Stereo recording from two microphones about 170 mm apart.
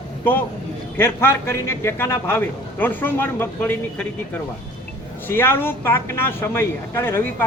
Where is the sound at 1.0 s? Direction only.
15° left (ahead or behind).